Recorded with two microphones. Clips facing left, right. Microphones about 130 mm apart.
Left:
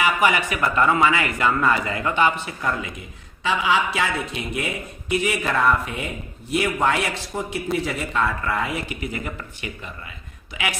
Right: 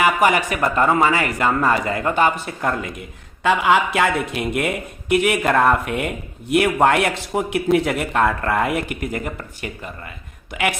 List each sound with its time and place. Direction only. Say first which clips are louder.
0.0 s a man's voice: right 3 dB; 45° right (ahead or behind)
7.3 s a man's voice: right 8 dB; 65° right (ahead or behind); by 10.8 s 50° right (ahead or behind)